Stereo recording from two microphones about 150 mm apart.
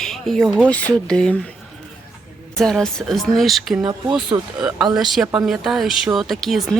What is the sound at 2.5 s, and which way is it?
Speech, 5° left (ahead or behind).